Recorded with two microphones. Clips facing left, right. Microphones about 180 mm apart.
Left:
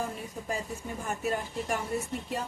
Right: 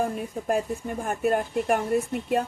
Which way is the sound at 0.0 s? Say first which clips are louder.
Right 8 dB; 55° right (ahead or behind).